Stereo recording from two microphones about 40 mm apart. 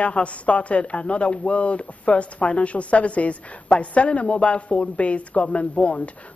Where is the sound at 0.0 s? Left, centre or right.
Left.